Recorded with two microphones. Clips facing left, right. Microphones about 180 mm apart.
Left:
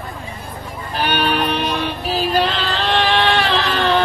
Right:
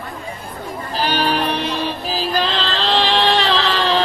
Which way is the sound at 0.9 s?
60° left (ahead or behind).